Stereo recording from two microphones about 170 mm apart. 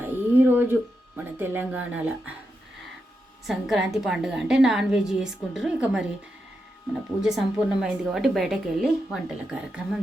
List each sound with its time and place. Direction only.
0.0 s a sound: 10° right (ahead or behind)
3.4 s a woman's voice: centre (ahead or behind)
7.2 s a woman's voice: 5° right (ahead or behind)